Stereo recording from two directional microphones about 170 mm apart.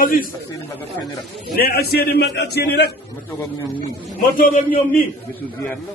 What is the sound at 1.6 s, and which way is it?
A man's voice, 65° left (ahead or behind).